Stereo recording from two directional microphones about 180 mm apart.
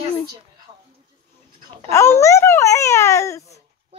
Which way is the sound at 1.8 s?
15° left (ahead or behind).